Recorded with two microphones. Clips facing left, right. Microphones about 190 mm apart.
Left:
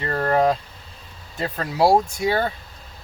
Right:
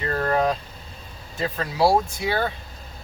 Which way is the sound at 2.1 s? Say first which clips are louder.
Left 4 dB; 45° left (ahead or behind).